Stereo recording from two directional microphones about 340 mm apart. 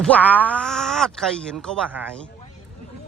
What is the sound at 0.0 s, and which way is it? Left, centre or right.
Speech, centre.